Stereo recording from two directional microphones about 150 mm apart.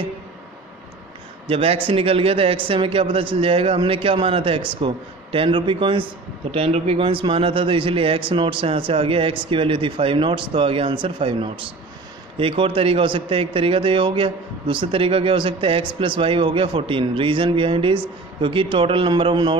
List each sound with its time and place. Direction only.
1.5 s a man's voice: 40° right (ahead or behind)